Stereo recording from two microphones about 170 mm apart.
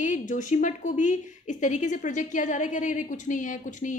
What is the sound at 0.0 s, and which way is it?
A woman's voice, 45° left (ahead or behind).